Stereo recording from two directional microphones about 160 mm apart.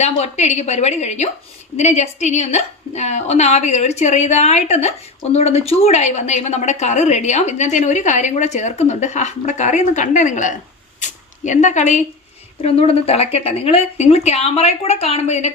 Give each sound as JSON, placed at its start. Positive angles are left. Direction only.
{"t": 0.0, "sound": "a woman's voice", "side_deg": 45}